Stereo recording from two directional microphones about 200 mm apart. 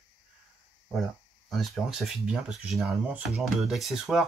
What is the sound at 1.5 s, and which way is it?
Speech, centre (ahead or behind).